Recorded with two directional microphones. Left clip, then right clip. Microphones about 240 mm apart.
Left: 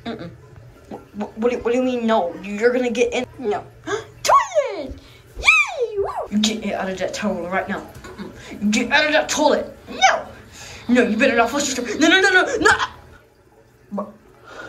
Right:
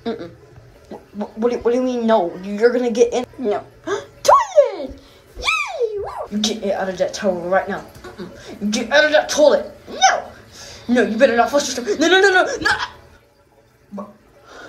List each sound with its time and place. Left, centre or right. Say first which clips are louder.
0.0 s speech: right 5 dB; right
1.1 s a sound: right 1 dB; centre
6.0 s a man's voice: left 1 dB; centre
12.5 s speech: left 3 dB; centre